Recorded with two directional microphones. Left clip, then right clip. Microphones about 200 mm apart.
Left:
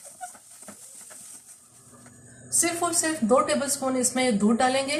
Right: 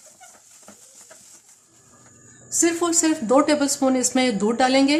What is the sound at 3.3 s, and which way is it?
Speech, 50° right (ahead or behind).